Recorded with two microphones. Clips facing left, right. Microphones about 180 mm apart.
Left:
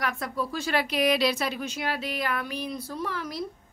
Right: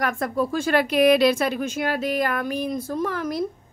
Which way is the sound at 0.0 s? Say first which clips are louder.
Right 7 dB; 50° right (ahead or behind).